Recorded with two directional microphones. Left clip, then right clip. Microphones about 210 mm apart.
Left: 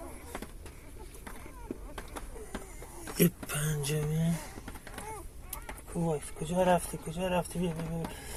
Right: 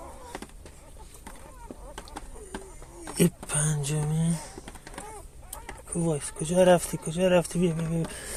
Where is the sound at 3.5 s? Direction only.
25° right (ahead or behind).